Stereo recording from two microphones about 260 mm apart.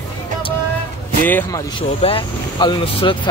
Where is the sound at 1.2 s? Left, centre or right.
Centre.